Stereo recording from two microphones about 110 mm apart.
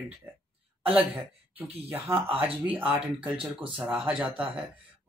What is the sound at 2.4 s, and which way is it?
Speech, 55° right (ahead or behind).